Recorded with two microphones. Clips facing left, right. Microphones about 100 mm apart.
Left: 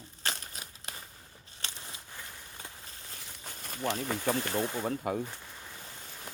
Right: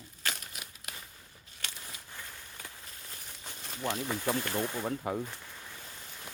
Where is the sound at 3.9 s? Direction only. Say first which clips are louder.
Even; 40° left (ahead or behind).